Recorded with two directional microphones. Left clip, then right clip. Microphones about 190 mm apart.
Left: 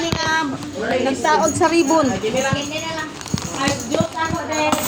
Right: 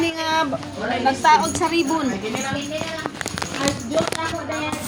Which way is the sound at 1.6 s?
35° right (ahead or behind).